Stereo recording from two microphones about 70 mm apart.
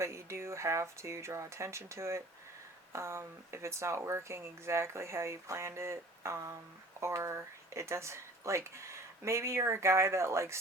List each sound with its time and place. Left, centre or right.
0.0 s speech: right